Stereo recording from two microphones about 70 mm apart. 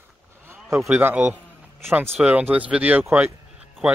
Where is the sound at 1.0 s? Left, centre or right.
Right.